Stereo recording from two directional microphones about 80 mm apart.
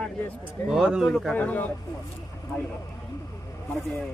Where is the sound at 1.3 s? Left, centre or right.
Centre.